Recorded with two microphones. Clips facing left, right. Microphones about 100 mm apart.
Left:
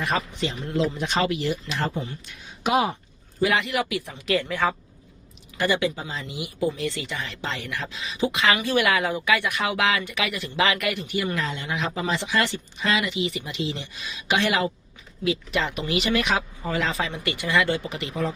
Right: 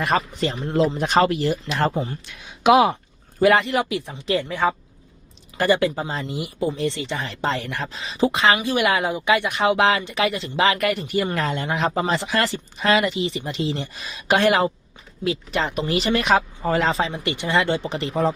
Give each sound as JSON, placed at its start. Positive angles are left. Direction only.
{"t": 0.3, "sound": "speech", "side_deg": -40}
{"t": 2.4, "sound": "speech", "side_deg": -90}
{"t": 3.4, "sound": "speech", "side_deg": -40}
{"t": 4.4, "sound": "speech", "side_deg": -10}
{"t": 5.5, "sound": "speech", "side_deg": -45}
{"t": 8.5, "sound": "speech", "side_deg": -15}
{"t": 17.1, "sound": "speech", "side_deg": -25}